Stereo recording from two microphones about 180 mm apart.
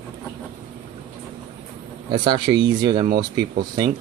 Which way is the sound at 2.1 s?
25° right (ahead or behind).